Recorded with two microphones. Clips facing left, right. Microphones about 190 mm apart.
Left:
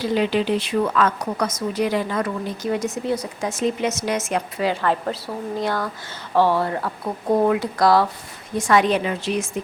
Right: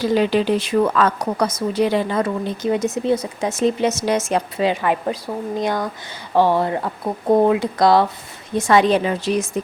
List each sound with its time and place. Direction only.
0.0 s a woman's voice: 40° right (ahead or behind)